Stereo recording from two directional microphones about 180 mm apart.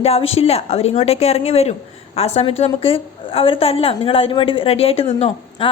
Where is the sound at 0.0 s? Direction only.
35° left (ahead or behind).